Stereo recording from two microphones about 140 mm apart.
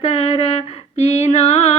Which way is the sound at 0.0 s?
45° left (ahead or behind).